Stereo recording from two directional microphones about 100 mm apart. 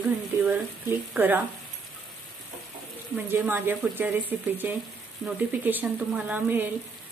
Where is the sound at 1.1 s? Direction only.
20° right (ahead or behind).